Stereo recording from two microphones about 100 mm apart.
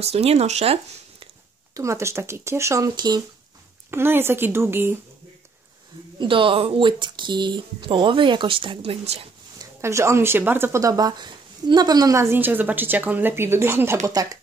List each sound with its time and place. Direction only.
0.0 s speech: 90° right
1.7 s speech: 30° right (ahead or behind)
3.9 s speech: 25° right (ahead or behind)
6.1 s speech: 60° right (ahead or behind); by 9.2 s 90° right
9.8 s speech: 30° right (ahead or behind)